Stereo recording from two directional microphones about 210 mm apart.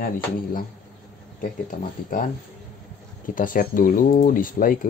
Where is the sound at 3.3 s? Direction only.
40° left (ahead or behind).